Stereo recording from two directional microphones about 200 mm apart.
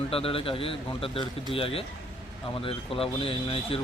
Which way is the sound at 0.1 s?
30° left (ahead or behind).